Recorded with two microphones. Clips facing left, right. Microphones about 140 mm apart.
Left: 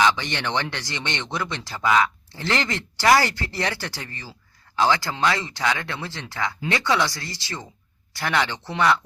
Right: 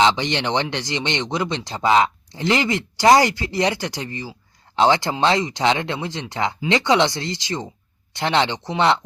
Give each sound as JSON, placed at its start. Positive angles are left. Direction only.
{"t": 0.0, "sound": "speech", "side_deg": -20}